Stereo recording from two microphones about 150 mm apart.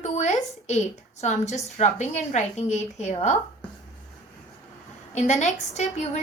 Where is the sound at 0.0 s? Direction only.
50° left (ahead or behind).